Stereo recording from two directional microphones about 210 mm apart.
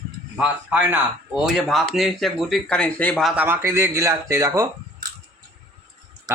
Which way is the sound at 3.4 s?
10° right (ahead or behind).